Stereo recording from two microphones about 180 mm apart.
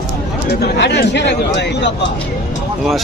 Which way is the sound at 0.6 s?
70° left (ahead or behind).